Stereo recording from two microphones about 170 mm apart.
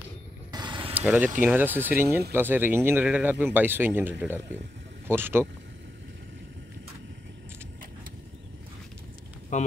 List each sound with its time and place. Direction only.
0.5 s mechanisms: 25° right (ahead or behind)
0.9 s speech: 10° right (ahead or behind)
9.5 s speech: 50° left (ahead or behind)